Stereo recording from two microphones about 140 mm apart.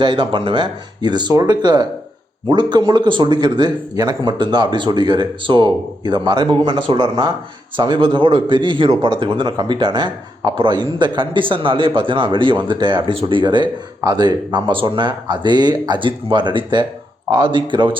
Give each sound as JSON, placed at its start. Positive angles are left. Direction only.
{"t": 0.0, "sound": "speech", "side_deg": -35}